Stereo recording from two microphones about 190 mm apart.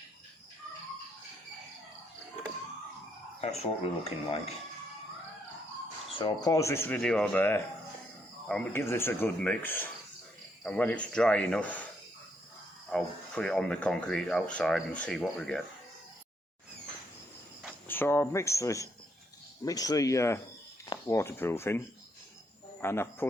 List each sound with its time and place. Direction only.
3.4 s speech: 35° left (ahead or behind)
6.1 s speech: 25° left (ahead or behind); by 11.9 s 10° left (ahead or behind)
12.9 s speech: 5° left (ahead or behind)
17.7 s speech: 10° left (ahead or behind)